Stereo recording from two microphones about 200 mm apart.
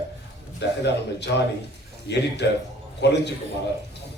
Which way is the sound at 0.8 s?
60° left (ahead or behind).